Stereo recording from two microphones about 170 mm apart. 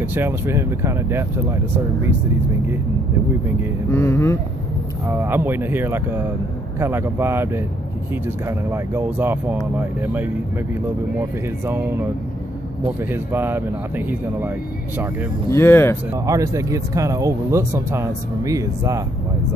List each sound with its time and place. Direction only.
0.0 s speech: 10° right (ahead or behind)
3.9 s speech: 15° left (ahead or behind)
5.0 s speech: 15° right (ahead or behind)
13.1 s speech: 15° right (ahead or behind)
15.5 s speech: 15° left (ahead or behind)
16.1 s speech: 20° right (ahead or behind)